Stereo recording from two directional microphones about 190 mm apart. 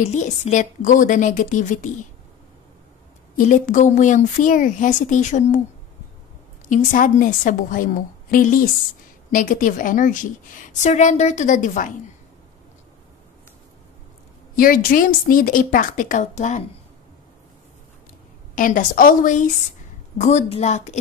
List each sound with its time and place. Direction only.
0.1 s a woman's voice: 40° left (ahead or behind)
3.3 s a woman's voice: 45° left (ahead or behind)
6.7 s a woman's voice: 45° left (ahead or behind)
14.5 s a woman's voice: 50° left (ahead or behind)
18.5 s a woman's voice: 45° left (ahead or behind)